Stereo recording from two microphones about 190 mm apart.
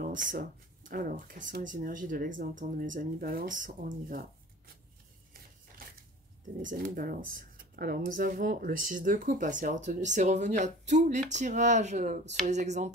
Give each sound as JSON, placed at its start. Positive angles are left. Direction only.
{"t": 0.0, "sound": "speech", "side_deg": -45}
{"t": 6.6, "sound": "speech", "side_deg": -45}